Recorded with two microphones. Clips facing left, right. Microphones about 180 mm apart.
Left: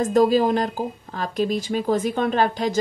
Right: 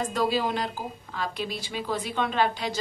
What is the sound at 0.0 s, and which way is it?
Speech, 45° left (ahead or behind).